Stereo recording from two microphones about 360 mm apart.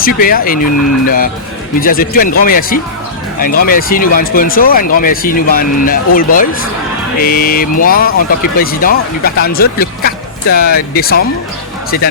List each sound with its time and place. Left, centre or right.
0.0 s speech: left